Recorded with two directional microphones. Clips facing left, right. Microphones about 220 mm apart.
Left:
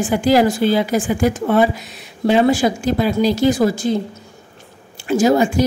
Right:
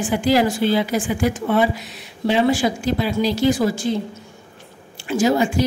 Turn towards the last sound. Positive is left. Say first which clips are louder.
# left 4 dB
turn(degrees=45)  # may be behind; listen again after turning